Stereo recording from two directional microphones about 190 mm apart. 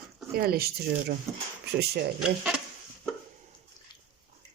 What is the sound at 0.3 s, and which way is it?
Speech, 55° right (ahead or behind).